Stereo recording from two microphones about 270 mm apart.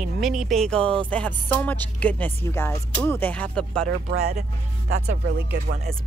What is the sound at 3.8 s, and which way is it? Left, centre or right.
Speech, right.